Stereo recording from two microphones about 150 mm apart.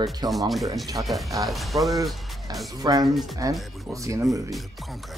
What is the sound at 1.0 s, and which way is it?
Music, centre (ahead or behind).